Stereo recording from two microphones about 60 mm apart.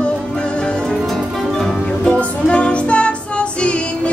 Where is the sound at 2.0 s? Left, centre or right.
Centre.